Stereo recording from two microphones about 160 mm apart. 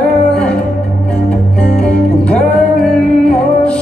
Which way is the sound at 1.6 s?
5° left (ahead or behind).